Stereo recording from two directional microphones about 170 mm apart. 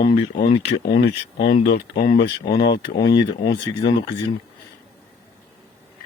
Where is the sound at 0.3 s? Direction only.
25° left (ahead or behind).